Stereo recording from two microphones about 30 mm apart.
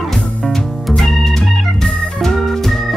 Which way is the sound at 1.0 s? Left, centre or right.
Centre.